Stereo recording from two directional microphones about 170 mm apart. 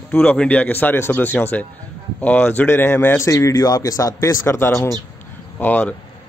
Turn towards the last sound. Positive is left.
turn(degrees=10)  # may be behind; listen again after turning